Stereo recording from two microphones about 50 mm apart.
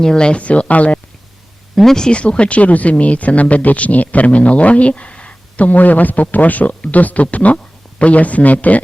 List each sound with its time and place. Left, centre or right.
0.0 s speech: centre
1.7 s speech: centre
2.0 s speech: left